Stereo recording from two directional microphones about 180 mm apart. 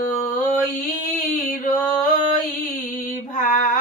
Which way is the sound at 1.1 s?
45° left (ahead or behind).